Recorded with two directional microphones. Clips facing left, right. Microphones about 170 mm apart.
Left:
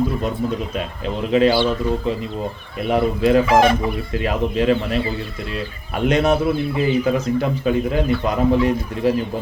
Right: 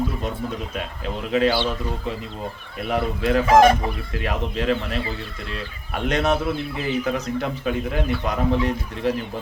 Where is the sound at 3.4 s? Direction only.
45° right (ahead or behind).